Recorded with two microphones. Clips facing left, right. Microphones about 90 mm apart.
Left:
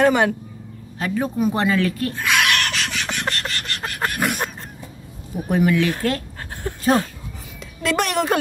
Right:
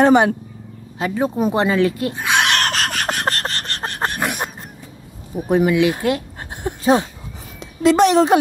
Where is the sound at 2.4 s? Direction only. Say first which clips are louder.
Right 3 dB; 40° right (ahead or behind).